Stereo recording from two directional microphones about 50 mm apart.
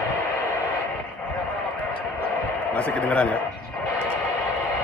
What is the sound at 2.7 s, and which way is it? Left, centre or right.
Speech, left.